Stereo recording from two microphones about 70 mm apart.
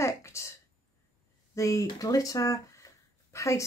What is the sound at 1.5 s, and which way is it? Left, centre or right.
Speech, left.